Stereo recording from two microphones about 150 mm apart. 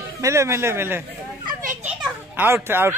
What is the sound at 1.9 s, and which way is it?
Children playing, 10° right (ahead or behind).